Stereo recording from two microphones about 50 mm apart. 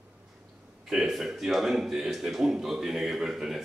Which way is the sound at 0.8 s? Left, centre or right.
Centre.